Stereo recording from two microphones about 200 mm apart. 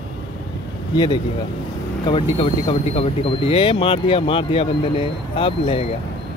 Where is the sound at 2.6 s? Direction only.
30° left (ahead or behind).